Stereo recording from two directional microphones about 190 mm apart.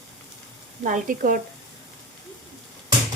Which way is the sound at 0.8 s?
45° right (ahead or behind).